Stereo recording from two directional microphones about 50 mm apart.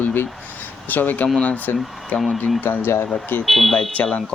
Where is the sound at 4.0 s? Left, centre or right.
Left.